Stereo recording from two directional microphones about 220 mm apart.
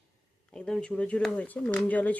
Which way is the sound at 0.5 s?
5° left (ahead or behind).